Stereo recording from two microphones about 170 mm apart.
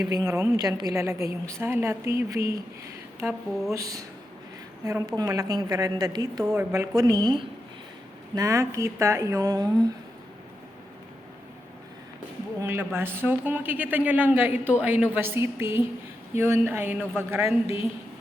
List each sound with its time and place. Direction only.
0.3 s speech: 20° right (ahead or behind)
3.2 s speech: 5° right (ahead or behind)
3.7 s a woman's voice: 20° right (ahead or behind)
12.5 s speech: 15° right (ahead or behind)